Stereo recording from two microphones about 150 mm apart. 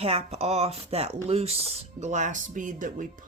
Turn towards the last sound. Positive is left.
turn(degrees=-60)  # may be behind; listen again after turning